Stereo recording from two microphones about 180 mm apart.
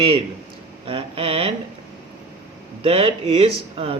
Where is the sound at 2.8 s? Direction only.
30° right (ahead or behind).